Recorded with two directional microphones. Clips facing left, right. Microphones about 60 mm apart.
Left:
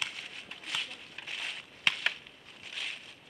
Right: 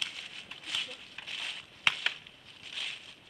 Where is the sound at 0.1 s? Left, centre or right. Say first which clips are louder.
Left 1 dB; centre.